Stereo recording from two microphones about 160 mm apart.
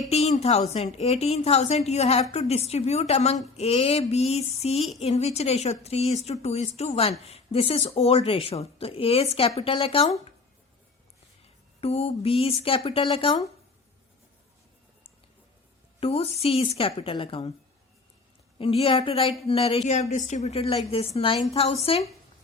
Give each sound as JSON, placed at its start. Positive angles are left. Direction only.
{"t": 0.1, "sound": "a woman's voice", "side_deg": 40}
{"t": 11.4, "sound": "speech", "side_deg": 40}
{"t": 16.0, "sound": "a woman's voice", "side_deg": 40}
{"t": 18.6, "sound": "a woman's voice", "side_deg": 35}